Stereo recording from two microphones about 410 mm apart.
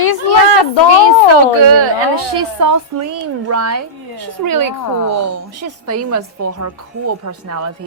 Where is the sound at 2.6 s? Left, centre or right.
Right.